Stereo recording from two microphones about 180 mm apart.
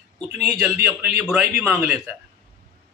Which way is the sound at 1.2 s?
5° right (ahead or behind).